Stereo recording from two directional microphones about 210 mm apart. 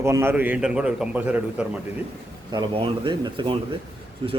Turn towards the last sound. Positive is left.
turn(degrees=-25)  # may be behind; listen again after turning